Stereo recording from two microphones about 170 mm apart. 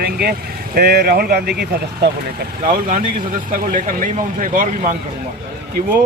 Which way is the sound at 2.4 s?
55° right (ahead or behind).